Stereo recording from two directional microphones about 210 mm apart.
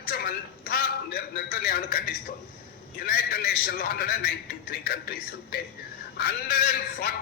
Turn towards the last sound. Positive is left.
turn(degrees=45)  # may be behind; listen again after turning